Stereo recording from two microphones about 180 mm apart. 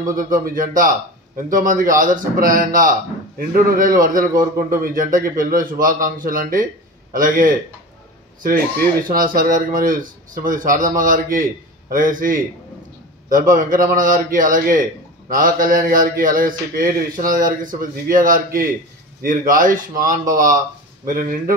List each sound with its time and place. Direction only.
0.1 s a man's voice: 50° right (ahead or behind)
4.3 s a man's voice: 20° right (ahead or behind)
4.6 s a man's voice: 50° right (ahead or behind)
9.0 s a man's voice: 50° right (ahead or behind)